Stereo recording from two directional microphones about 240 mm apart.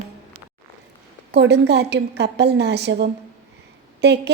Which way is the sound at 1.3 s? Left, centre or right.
Right.